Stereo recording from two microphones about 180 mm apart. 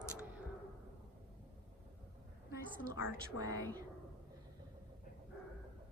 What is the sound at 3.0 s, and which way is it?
Speech, 20° right (ahead or behind).